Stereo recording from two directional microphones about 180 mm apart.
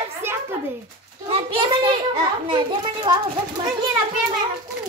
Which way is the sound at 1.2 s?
30° right (ahead or behind).